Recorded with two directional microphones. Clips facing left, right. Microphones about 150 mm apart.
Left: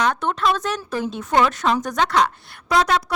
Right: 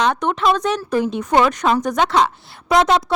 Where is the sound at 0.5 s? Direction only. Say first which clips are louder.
Right 6 dB; centre (ahead or behind).